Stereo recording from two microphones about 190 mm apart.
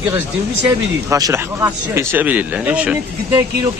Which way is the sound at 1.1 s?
15° right (ahead or behind).